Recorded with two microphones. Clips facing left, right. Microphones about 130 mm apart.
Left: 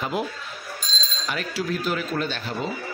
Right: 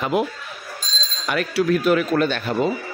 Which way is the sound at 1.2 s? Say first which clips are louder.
Right 8 dB; 65° right (ahead or behind).